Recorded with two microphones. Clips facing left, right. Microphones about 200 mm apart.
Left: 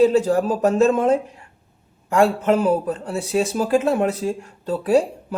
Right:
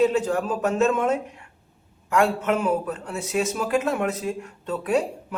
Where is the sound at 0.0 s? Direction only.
35° left (ahead or behind).